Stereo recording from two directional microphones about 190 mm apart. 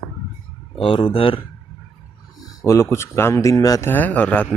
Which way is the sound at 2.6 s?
15° left (ahead or behind).